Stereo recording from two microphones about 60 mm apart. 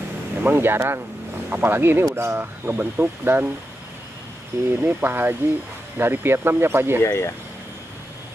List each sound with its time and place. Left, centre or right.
0.4 s speech: right
4.5 s speech: right
7.0 s speech: left